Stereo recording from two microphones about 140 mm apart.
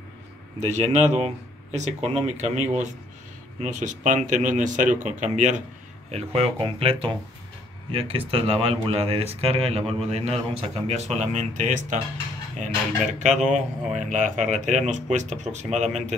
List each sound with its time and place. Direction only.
0.6 s speech: 55° right (ahead or behind)
6.1 s speech: 45° right (ahead or behind); by 12.0 s 60° right (ahead or behind)
13.2 s speech: 55° right (ahead or behind)